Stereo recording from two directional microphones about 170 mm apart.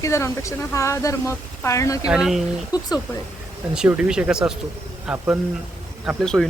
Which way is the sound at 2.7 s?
20° left (ahead or behind).